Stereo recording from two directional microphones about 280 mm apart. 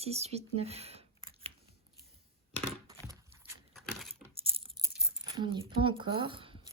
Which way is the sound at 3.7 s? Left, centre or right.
Centre.